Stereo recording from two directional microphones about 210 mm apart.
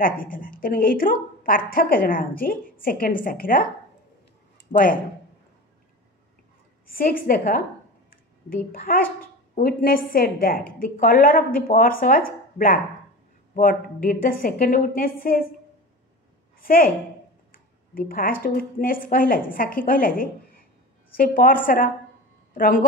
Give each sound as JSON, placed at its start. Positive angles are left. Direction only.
{"t": 0.0, "sound": "a woman's voice", "side_deg": 40}
{"t": 4.7, "sound": "a woman's voice", "side_deg": 35}
{"t": 7.0, "sound": "speech", "side_deg": 45}
{"t": 16.6, "sound": "a woman's voice", "side_deg": 40}